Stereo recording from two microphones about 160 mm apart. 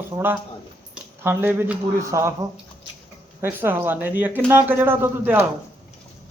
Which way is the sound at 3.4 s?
15° right (ahead or behind).